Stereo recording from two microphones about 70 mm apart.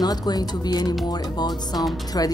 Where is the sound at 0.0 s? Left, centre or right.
Left.